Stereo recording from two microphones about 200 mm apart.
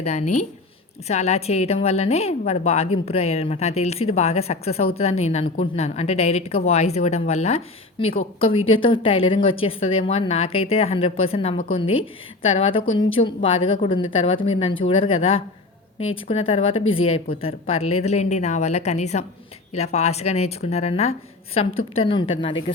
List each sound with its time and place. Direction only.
0.0 s a woman's voice: 35° left (ahead or behind)
12.8 s a woman's voice: 85° left
13.1 s a woman's voice: 25° left (ahead or behind)